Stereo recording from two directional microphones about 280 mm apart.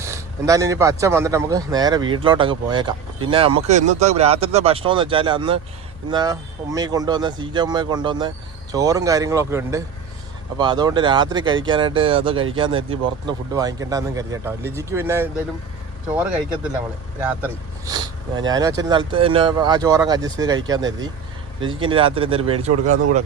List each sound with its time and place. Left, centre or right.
0.0 s speech: centre
17.2 s speech: centre
22.7 s speech: right